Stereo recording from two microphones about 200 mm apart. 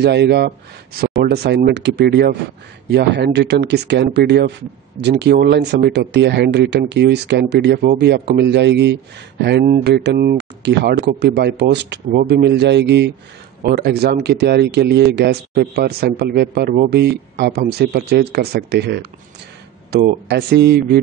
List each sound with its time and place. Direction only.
0.0 s speech: 55° right (ahead or behind)